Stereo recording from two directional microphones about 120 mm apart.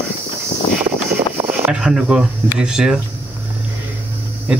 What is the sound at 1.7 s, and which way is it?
Speech, 5° right (ahead or behind).